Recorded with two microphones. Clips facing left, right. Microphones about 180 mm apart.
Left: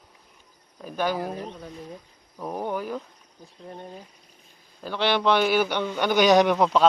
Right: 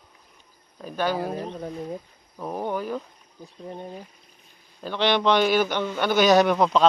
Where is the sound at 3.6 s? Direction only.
10° right (ahead or behind).